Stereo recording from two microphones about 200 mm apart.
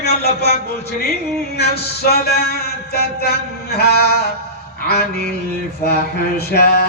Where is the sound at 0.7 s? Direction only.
50° left (ahead or behind).